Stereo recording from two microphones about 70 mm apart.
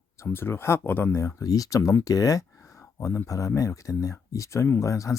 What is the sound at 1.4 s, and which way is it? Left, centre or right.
Speech, left.